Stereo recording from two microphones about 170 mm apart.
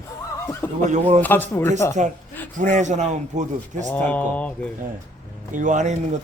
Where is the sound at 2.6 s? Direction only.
45° right (ahead or behind).